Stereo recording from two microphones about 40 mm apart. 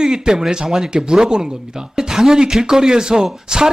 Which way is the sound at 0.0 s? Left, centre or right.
Centre.